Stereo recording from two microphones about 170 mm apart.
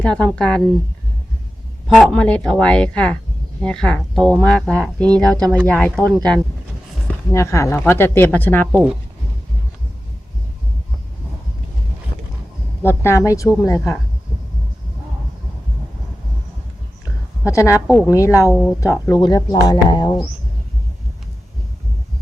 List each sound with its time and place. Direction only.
0.0 s speech: 5° left (ahead or behind)
1.9 s speech: 5° left (ahead or behind)
5.4 s speech: 10° right (ahead or behind)
5.6 s speech: 10° left (ahead or behind)
12.8 s speech: 15° left (ahead or behind)
17.5 s speech: 15° left (ahead or behind)
18.5 s speech: centre (ahead or behind)
18.8 s speech: 20° left (ahead or behind)